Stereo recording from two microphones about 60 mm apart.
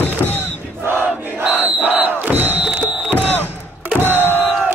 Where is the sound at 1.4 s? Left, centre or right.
Right.